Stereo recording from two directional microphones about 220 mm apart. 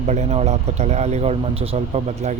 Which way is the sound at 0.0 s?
30° right (ahead or behind).